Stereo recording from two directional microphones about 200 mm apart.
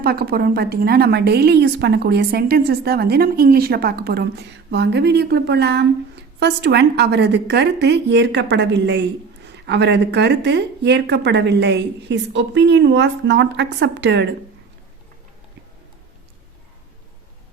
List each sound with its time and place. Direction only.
0.0 s a woman's voice: 50° right (ahead or behind)